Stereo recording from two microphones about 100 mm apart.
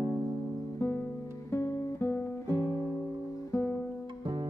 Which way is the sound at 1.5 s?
25° left (ahead or behind).